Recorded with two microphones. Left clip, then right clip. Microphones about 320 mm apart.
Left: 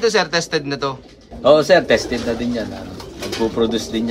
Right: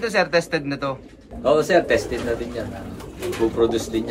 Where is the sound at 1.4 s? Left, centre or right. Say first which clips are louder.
Left 5 dB; centre.